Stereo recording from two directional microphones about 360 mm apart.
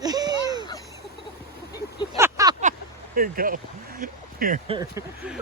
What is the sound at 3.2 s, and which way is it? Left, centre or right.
Speech, right.